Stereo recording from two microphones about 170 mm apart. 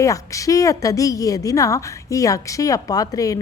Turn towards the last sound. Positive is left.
turn(degrees=20)  # may be behind; listen again after turning